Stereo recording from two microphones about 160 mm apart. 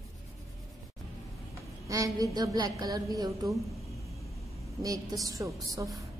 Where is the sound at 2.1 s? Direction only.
25° right (ahead or behind).